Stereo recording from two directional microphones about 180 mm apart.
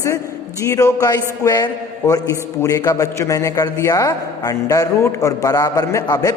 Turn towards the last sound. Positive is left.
turn(degrees=20)  # may be behind; listen again after turning